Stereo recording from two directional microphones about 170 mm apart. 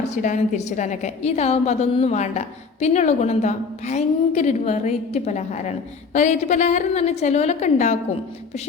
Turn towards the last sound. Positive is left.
turn(degrees=45)  # may be behind; listen again after turning